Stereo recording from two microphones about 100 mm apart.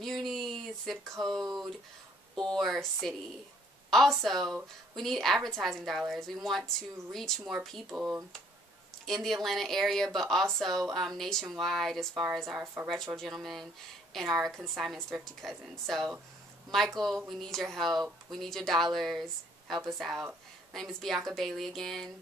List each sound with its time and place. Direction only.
0.0 s a sound: centre (ahead or behind)
1.4 s speech: 40° right (ahead or behind)
2.5 s speech: centre (ahead or behind)
7.9 s speech: 15° right (ahead or behind)
9.0 s speech: centre (ahead or behind)